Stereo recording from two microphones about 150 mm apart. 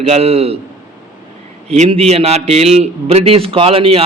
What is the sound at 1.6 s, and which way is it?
A man's voice, 45° right (ahead or behind).